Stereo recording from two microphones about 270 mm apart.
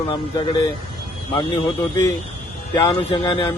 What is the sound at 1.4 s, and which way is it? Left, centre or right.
Speech, centre.